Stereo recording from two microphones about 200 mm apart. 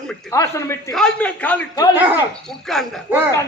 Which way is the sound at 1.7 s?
20° left (ahead or behind).